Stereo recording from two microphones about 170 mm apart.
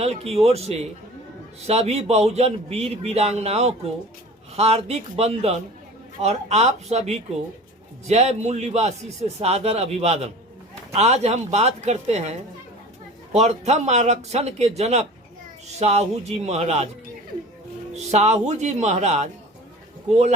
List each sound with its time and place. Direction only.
0.0 s a man's voice: 35° right (ahead or behind)
13.3 s a man's voice: 40° right (ahead or behind)
17.9 s a man's voice: 40° right (ahead or behind)